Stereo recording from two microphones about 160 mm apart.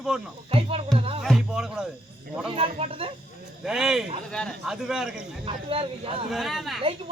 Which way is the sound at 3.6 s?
5° right (ahead or behind).